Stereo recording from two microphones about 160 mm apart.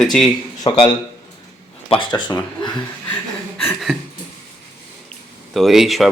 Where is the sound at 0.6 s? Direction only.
25° left (ahead or behind).